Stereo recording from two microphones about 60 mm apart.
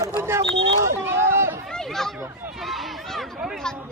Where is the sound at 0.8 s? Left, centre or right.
Right.